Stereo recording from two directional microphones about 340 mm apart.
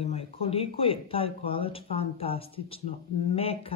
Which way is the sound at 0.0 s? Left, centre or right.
Centre.